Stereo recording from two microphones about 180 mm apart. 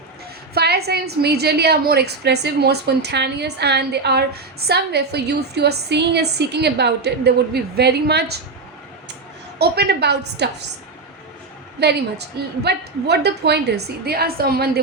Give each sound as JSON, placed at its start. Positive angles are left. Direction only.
{"t": 0.5, "sound": "a woman's voice", "side_deg": -65}
{"t": 9.6, "sound": "a woman's voice", "side_deg": -65}
{"t": 11.8, "sound": "a woman's voice", "side_deg": -65}